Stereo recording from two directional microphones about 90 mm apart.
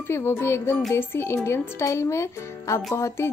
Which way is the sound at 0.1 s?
25° left (ahead or behind).